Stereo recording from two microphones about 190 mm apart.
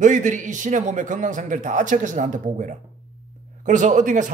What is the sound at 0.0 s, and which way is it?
A man's voice, 40° right (ahead or behind).